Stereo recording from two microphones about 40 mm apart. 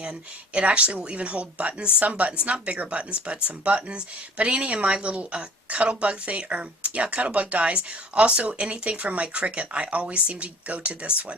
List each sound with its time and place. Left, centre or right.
0.0 s speech: right